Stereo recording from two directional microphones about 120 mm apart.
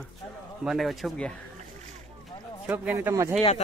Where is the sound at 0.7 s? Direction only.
Centre (ahead or behind).